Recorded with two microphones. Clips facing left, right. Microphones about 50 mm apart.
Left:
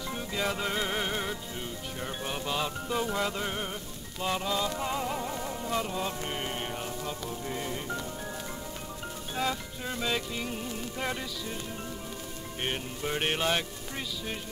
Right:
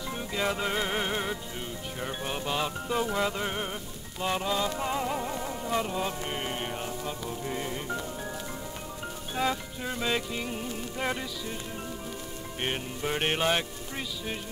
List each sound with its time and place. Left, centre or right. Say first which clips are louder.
0.1 s music: right 2 dB; centre
9.3 s music: right 2 dB; centre
12.6 s music: right 2 dB; centre